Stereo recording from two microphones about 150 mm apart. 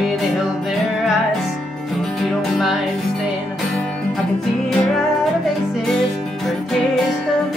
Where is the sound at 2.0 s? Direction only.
Centre (ahead or behind).